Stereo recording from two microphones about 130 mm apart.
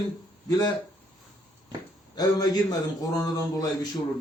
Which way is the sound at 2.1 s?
30° left (ahead or behind).